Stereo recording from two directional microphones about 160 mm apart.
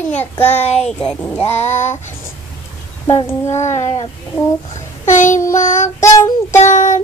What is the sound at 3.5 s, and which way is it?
Child singing, 45° left (ahead or behind).